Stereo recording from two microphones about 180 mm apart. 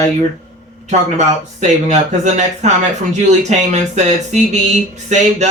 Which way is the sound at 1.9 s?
40° right (ahead or behind).